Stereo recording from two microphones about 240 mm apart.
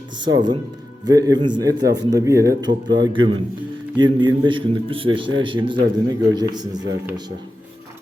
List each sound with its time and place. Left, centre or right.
0.2 s a man's voice: centre